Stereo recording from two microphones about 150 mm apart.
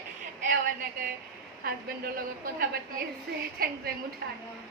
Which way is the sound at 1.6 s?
85° right.